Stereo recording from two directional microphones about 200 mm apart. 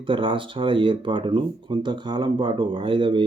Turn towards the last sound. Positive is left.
turn(degrees=-25)  # may be behind; listen again after turning